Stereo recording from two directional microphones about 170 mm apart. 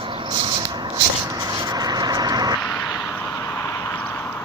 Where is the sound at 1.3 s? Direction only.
25° right (ahead or behind).